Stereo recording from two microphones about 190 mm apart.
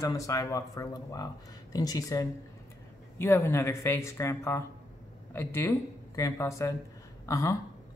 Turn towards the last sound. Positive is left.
turn(degrees=15)  # may be behind; listen again after turning